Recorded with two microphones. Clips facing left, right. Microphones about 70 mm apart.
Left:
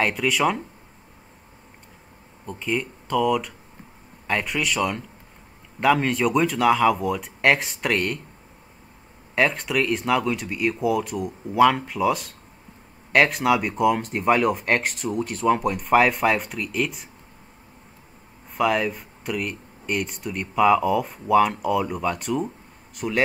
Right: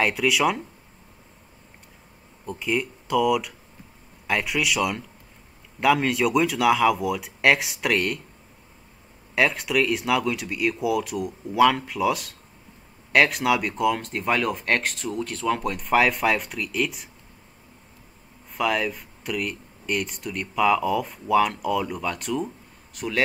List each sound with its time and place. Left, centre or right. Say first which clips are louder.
0.0 s speech: even; centre
2.4 s speech: right 1 dB; centre
9.3 s speech: even; centre
15.2 s speech: left 5 dB; centre
15.6 s speech: even; centre
18.5 s a man's voice: left 3 dB; centre